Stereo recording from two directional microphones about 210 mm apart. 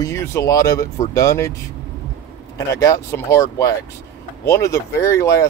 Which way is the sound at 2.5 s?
15° left (ahead or behind).